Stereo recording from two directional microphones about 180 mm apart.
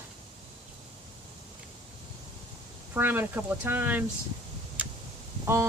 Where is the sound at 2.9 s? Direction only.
10° right (ahead or behind).